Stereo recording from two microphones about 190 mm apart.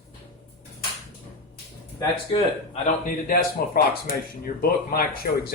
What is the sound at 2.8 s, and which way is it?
Speech, 50° left (ahead or behind).